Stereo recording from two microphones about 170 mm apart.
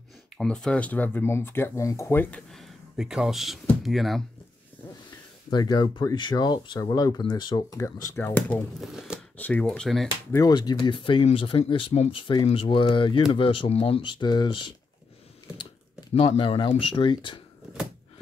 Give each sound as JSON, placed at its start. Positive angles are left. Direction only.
{"t": 0.4, "sound": "speech", "side_deg": 5}
{"t": 2.5, "sound": "speech", "side_deg": 0}
{"t": 5.5, "sound": "speech", "side_deg": 25}
{"t": 8.8, "sound": "speech", "side_deg": -5}
{"t": 9.4, "sound": "speech", "side_deg": 5}
{"t": 10.3, "sound": "speech", "side_deg": 20}